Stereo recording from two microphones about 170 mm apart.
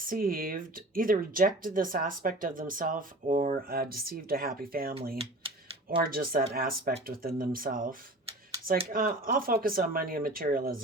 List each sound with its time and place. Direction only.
0.0 s speech: 55° right (ahead or behind)
5.1 s speech: 35° right (ahead or behind)
6.0 s speech: 60° right (ahead or behind)